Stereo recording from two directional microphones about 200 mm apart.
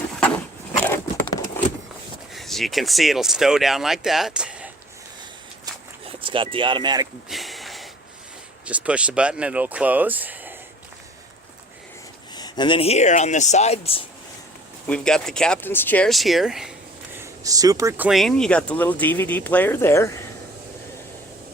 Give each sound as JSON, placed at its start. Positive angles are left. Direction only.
{"t": 0.9, "sound": "a sound", "side_deg": 10}
{"t": 2.3, "sound": "speech", "side_deg": 0}
{"t": 6.1, "sound": "speech", "side_deg": -25}
{"t": 7.3, "sound": "a sound", "side_deg": 0}
{"t": 8.6, "sound": "speech", "side_deg": -5}
{"t": 12.3, "sound": "speech", "side_deg": 20}
{"t": 14.8, "sound": "speech", "side_deg": 5}
{"t": 17.2, "sound": "speech", "side_deg": -15}